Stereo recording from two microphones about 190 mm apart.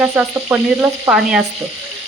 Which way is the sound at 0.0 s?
5° right (ahead or behind).